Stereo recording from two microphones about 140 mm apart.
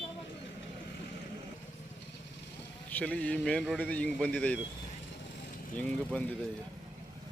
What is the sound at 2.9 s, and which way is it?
Speech, 10° left (ahead or behind).